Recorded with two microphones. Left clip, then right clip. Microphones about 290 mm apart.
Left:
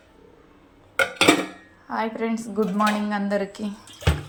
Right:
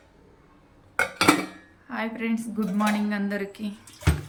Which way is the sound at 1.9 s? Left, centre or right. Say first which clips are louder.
Left 4 dB; centre.